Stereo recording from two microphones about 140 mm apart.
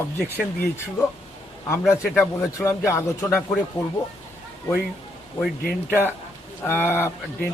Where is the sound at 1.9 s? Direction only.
15° left (ahead or behind).